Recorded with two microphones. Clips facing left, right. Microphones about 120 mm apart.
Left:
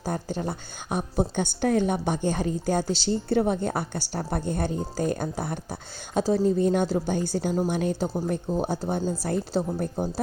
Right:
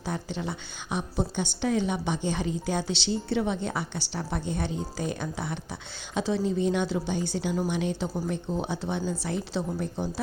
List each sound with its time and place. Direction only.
0.0 s a woman's voice: 45° left (ahead or behind)